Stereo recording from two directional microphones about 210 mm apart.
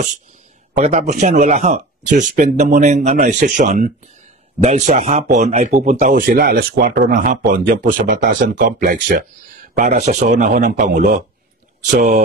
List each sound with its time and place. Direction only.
0.7 s a man's voice: 30° right (ahead or behind)
9.8 s a man's voice: 35° right (ahead or behind)